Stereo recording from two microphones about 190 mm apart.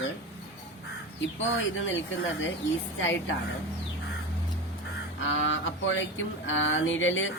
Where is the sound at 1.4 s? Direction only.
90° left.